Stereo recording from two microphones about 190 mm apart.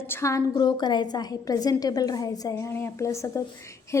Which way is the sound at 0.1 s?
15° left (ahead or behind).